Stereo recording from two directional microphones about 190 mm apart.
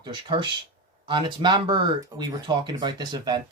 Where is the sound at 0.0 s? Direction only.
25° right (ahead or behind).